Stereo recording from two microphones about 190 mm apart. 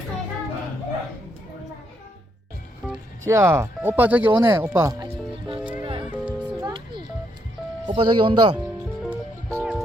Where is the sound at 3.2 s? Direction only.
15° right (ahead or behind).